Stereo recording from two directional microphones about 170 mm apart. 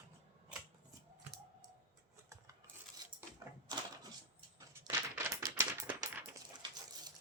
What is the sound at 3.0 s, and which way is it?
Typewriter, 20° right (ahead or behind).